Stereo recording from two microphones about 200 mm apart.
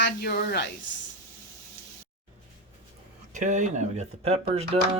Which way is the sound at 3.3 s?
40° right (ahead or behind).